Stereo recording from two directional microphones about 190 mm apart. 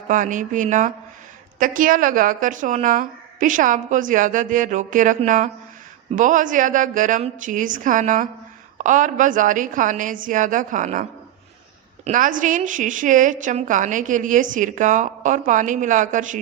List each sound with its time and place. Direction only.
0.1 s a woman's voice: 45° right (ahead or behind)
12.0 s a woman's voice: 45° right (ahead or behind)